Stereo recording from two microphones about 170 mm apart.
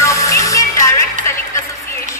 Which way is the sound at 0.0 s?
20° left (ahead or behind).